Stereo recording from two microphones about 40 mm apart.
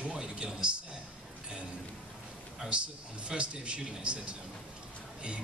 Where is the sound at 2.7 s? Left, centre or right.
Right.